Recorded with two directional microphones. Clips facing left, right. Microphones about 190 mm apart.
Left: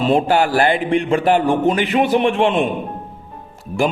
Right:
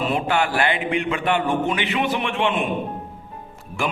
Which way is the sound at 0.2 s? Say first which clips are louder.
Left 6 dB; 40° left (ahead or behind).